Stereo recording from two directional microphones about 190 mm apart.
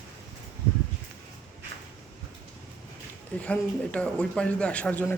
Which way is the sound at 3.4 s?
5° left (ahead or behind).